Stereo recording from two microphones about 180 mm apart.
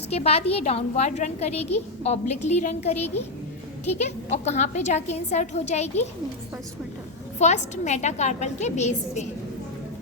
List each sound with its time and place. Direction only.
0.1 s a woman's voice: 35° left (ahead or behind)
7.3 s a woman's voice: 40° left (ahead or behind)